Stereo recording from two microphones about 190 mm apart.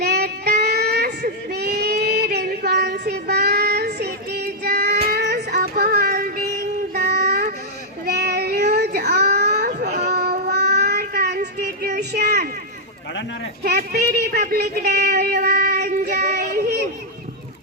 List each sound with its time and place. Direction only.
0.0 s child singing: 55° right (ahead or behind)
13.7 s a sound: 60° right (ahead or behind)
14.9 s child singing: 50° right (ahead or behind)